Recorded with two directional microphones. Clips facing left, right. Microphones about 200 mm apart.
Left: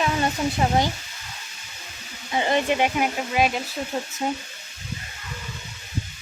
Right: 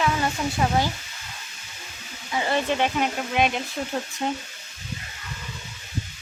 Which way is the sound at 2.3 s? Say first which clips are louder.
Left 2 dB; 20° left (ahead or behind).